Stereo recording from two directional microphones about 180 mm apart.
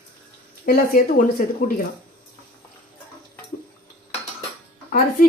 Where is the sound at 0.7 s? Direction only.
50° left (ahead or behind).